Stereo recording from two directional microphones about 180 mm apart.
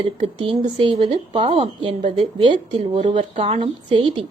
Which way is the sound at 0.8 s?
30° right (ahead or behind).